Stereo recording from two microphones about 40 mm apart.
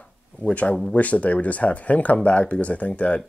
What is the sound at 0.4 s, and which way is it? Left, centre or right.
Speech, left.